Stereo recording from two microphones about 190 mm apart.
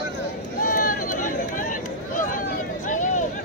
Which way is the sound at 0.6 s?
45° left (ahead or behind).